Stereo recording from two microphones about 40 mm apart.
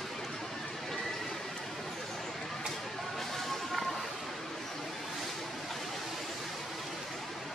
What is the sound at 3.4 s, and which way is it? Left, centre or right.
Music, centre.